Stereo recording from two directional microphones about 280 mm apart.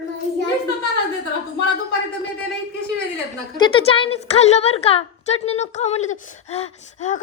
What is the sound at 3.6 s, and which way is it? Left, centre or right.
A woman's voice, centre.